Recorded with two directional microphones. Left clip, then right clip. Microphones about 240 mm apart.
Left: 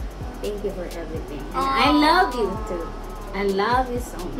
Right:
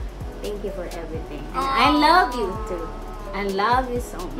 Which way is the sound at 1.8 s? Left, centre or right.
Centre.